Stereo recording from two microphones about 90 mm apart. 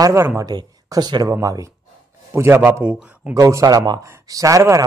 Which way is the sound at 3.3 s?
40° right (ahead or behind).